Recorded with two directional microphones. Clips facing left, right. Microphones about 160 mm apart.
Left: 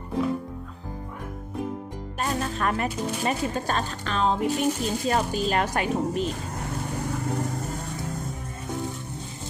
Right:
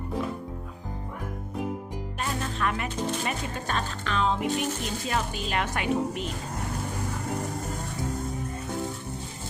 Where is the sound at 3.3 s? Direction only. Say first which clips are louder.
Left 5 dB; 40° left (ahead or behind).